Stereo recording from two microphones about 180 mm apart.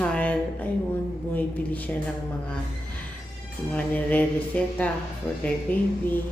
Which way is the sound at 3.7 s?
10° left (ahead or behind).